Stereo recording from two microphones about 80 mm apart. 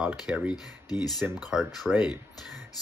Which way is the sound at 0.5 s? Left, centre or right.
Left.